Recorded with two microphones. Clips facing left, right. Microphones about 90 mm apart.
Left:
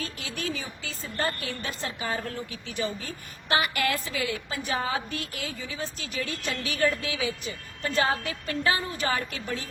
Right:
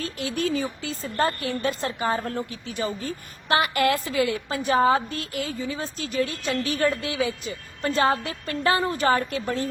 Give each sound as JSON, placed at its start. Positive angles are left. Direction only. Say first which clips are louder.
{"t": 0.0, "sound": "a woman's voice", "louder": "right 7 dB", "side_deg": -40}